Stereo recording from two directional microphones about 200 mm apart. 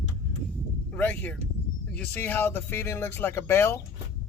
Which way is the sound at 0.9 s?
10° left (ahead or behind).